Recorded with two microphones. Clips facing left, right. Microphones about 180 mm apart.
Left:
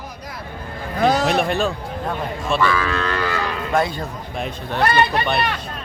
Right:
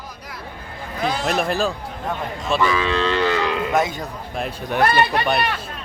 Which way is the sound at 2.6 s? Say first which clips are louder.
Right 2 dB; 20° right (ahead or behind).